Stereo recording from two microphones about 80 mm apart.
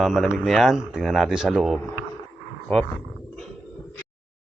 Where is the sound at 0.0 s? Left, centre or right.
Centre.